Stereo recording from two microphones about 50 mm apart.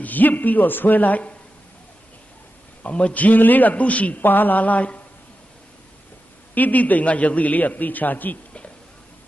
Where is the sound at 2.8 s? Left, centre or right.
Left.